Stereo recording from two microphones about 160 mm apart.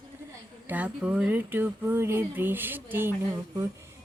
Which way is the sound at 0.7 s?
10° right (ahead or behind).